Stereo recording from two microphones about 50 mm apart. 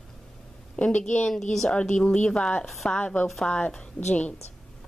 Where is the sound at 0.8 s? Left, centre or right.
Left.